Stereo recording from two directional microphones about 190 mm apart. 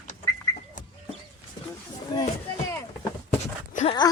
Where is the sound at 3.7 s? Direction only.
35° left (ahead or behind).